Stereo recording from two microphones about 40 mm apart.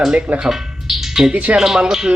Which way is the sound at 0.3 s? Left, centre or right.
Centre.